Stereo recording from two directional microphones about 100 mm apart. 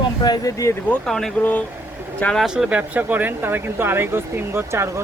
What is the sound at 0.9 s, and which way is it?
Speech, 5° left (ahead or behind).